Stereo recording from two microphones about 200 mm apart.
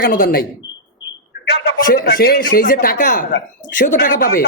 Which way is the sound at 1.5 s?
50° left (ahead or behind).